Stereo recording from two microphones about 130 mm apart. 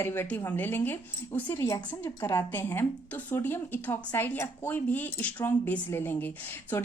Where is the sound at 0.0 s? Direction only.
15° left (ahead or behind).